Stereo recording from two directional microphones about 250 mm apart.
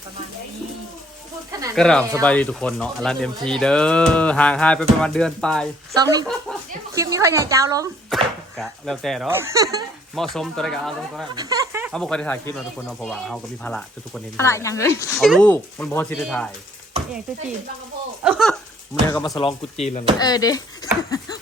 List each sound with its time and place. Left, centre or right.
1.5 s a woman's voice: centre
1.7 s speech: centre
5.9 s a woman's voice: centre
6.5 s chuckle: centre
6.9 s a woman's voice: centre
8.1 s speech: centre
10.2 s speech: centre
11.3 s a sound: centre
11.9 s speech: centre
15.1 s speech: centre
18.2 s speech: centre
19.1 s speech: centre
19.7 s chopping: left
20.1 s speech: centre